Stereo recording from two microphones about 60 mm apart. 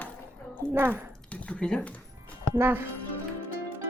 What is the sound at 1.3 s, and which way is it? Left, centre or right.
Speech, centre.